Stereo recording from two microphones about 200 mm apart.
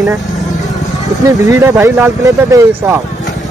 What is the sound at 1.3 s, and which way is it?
Speech, 15° right (ahead or behind).